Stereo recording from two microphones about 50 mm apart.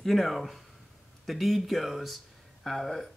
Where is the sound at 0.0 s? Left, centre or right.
Centre.